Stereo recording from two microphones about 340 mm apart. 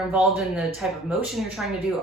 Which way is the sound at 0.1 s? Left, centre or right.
Centre.